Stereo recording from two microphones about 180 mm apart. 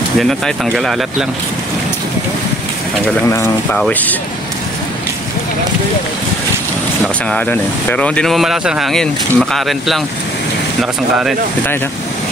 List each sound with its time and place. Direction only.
0.2 s speech: centre (ahead or behind)
3.3 s speech: 15° left (ahead or behind)
7.2 s speech: 10° left (ahead or behind)